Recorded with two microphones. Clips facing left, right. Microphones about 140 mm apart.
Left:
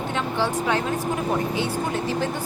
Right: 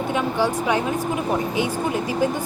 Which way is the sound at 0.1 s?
10° right (ahead or behind).